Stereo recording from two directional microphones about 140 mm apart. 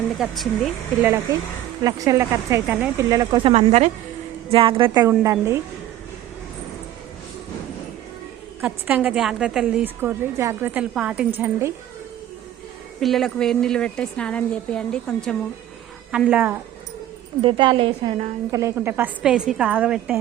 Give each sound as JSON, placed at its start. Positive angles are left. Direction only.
{"t": 0.2, "sound": "a woman's voice", "side_deg": 0}
{"t": 1.8, "sound": "speech", "side_deg": -25}
{"t": 3.4, "sound": "speech", "side_deg": -45}
{"t": 4.5, "sound": "a woman's voice", "side_deg": -40}
{"t": 5.0, "sound": "speech", "side_deg": -20}
{"t": 8.6, "sound": "a woman's voice", "side_deg": -10}
{"t": 9.8, "sound": "a woman's voice", "side_deg": -15}
{"t": 13.0, "sound": "a woman's voice", "side_deg": 0}
{"t": 16.1, "sound": "a woman's voice", "side_deg": -10}
{"t": 17.4, "sound": "a woman's voice", "side_deg": -40}
{"t": 18.5, "sound": "a woman's voice", "side_deg": -20}